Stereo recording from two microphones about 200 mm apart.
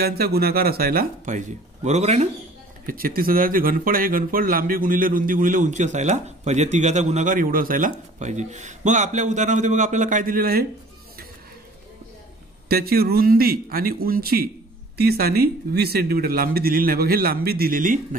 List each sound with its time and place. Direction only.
0.0 s speech: 50° right (ahead or behind); by 2.2 s 35° right (ahead or behind)
2.9 s speech: 45° right (ahead or behind)
12.6 s speech: 50° right (ahead or behind)